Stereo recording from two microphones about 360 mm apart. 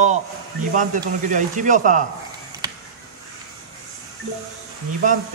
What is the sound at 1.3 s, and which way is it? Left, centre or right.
Speech, right.